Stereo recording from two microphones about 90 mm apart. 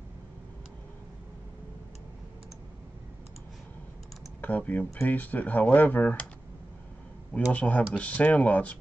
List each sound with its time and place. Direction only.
4.4 s speech: 20° left (ahead or behind)
7.5 s speech: 15° left (ahead or behind)